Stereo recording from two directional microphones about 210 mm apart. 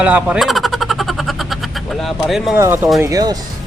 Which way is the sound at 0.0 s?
5° right (ahead or behind).